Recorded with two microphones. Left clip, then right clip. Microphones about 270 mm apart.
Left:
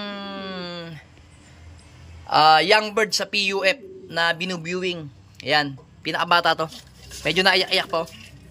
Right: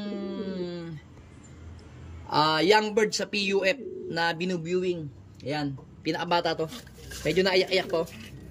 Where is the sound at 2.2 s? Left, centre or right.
Centre.